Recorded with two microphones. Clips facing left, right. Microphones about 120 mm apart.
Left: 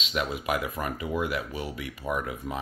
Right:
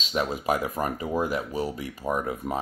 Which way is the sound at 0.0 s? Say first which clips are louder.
Right 3 dB; 35° right (ahead or behind).